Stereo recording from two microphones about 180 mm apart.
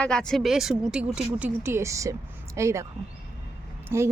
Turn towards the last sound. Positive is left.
turn(degrees=-15)  # may be behind; listen again after turning